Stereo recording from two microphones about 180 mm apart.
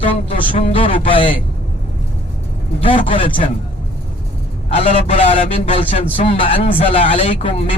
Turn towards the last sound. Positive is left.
turn(degrees=35)  # may be behind; listen again after turning